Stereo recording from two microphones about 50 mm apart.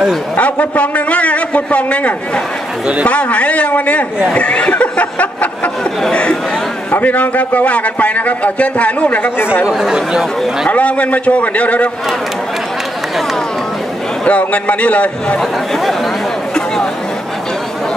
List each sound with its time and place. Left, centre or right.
0.4 s a man's voice: left
6.9 s a man's voice: left
9.7 s speech: centre
10.7 s a man's voice: left
14.4 s a man's voice: left
15.3 s speech: centre